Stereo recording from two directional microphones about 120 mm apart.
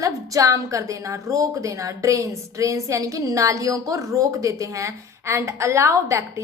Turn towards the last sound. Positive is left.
turn(degrees=-25)  # may be behind; listen again after turning